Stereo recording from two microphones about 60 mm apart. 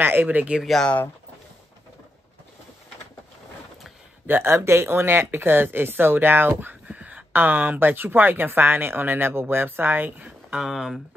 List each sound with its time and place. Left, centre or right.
0.0 s speech: right
4.3 s speech: right
4.6 s speech: right
10.5 s speech: centre